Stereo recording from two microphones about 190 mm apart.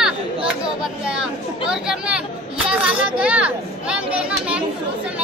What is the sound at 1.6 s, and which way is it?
A child's voice, 5° right (ahead or behind).